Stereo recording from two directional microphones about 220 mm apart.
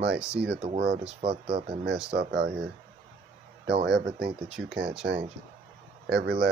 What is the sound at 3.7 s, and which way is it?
Speech, 50° right (ahead or behind).